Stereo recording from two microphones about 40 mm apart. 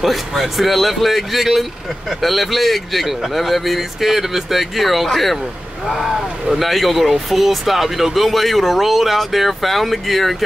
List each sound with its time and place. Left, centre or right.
0.0 s speech: centre